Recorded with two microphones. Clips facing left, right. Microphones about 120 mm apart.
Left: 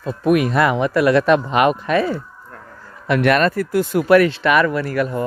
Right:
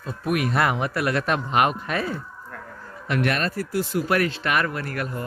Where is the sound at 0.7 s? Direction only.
90° left.